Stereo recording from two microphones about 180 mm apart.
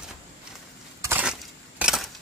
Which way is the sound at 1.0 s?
10° right (ahead or behind).